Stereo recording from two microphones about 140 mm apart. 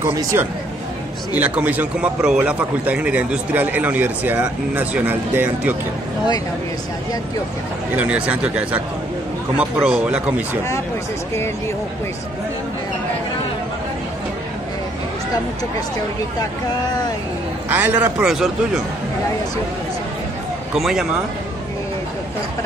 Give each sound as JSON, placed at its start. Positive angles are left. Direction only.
{"t": 0.0, "sound": "speech", "side_deg": -20}
{"t": 1.3, "sound": "a man's voice", "side_deg": -10}
{"t": 7.9, "sound": "a man's voice", "side_deg": -10}
{"t": 17.6, "sound": "a man's voice", "side_deg": -10}
{"t": 20.7, "sound": "speech", "side_deg": -5}